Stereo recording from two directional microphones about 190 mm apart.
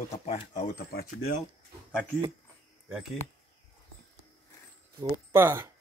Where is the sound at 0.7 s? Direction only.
50° left (ahead or behind).